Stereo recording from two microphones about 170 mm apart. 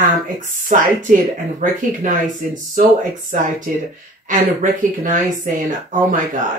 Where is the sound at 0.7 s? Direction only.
50° right (ahead or behind).